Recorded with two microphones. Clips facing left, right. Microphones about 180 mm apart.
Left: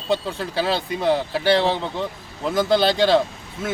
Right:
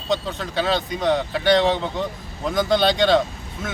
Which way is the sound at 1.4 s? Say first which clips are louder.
Right 2 dB; 30° left (ahead or behind).